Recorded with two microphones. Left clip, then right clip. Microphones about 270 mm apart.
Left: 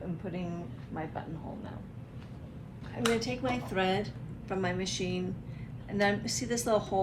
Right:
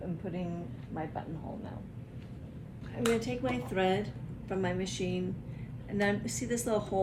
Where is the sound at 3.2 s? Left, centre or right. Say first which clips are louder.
Left 1 dB; centre.